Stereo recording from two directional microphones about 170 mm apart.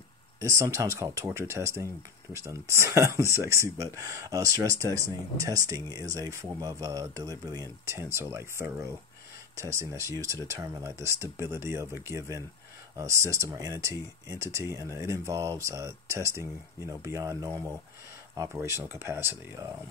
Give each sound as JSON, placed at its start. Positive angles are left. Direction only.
{"t": 0.4, "sound": "speech", "side_deg": -20}